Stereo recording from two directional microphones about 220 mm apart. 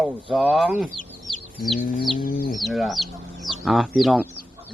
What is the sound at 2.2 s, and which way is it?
Speech, 40° left (ahead or behind).